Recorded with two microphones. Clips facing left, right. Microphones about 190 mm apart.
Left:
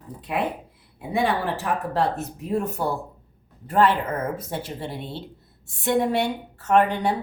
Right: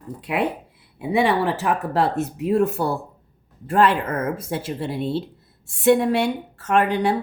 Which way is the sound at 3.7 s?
90° right.